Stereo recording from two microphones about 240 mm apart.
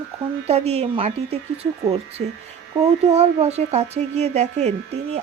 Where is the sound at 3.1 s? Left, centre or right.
Right.